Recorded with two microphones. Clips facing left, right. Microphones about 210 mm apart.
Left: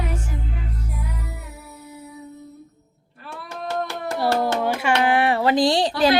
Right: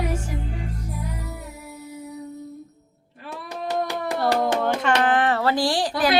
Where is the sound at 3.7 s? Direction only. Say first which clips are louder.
Right 1 dB; 15° right (ahead or behind).